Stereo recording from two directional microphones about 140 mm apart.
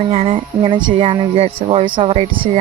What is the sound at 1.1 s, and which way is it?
Speech, 35° right (ahead or behind).